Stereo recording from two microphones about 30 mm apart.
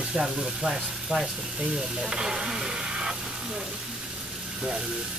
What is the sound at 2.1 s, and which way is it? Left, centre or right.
Speech, right.